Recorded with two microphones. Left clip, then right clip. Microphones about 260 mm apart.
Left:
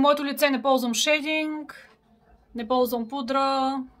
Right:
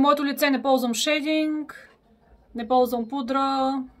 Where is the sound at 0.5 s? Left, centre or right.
Left.